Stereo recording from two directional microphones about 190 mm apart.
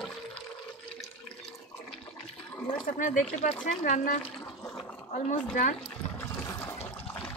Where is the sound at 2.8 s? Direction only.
45° left (ahead or behind).